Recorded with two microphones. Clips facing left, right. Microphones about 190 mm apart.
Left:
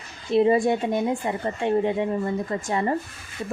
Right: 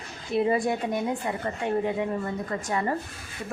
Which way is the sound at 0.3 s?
25° left (ahead or behind).